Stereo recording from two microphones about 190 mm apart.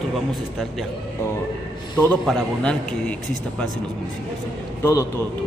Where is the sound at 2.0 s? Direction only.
5° left (ahead or behind).